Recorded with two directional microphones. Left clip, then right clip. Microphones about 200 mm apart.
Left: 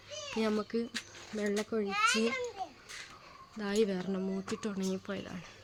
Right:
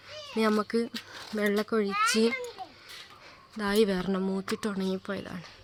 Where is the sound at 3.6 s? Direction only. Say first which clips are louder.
Right 6 dB; 40° right (ahead or behind).